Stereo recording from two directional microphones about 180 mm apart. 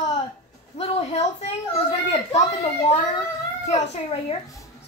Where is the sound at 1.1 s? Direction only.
35° left (ahead or behind).